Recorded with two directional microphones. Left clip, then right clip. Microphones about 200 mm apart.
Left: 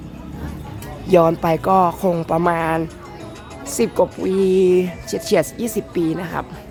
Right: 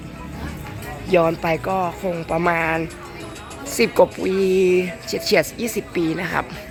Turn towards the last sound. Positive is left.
turn(degrees=5)  # may be behind; listen again after turning